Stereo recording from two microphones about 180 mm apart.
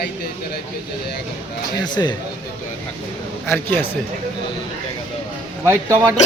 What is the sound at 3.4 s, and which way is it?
Speech, 10° left (ahead or behind).